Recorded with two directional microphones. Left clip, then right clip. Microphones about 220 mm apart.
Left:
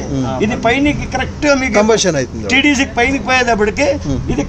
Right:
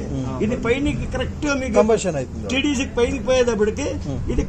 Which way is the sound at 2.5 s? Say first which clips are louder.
Left 10 dB; 25° left (ahead or behind).